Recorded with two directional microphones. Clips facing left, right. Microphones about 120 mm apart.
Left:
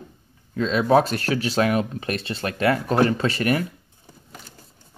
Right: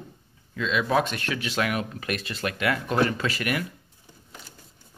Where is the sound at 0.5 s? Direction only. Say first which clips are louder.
Left 6 dB; 35° left (ahead or behind).